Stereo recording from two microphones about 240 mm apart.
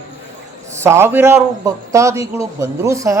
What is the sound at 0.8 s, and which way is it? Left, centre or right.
A man's voice, centre.